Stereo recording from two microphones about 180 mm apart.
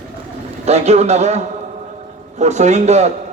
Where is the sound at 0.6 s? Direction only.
35° right (ahead or behind).